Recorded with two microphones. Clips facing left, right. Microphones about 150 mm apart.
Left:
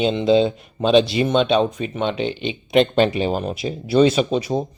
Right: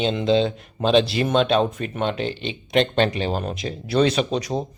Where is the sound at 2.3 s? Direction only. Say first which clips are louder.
Left 3 dB; 35° right (ahead or behind).